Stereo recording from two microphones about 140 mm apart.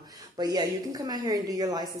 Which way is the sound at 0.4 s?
30° right (ahead or behind).